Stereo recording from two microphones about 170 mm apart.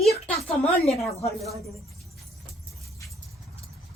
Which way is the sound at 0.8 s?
40° left (ahead or behind).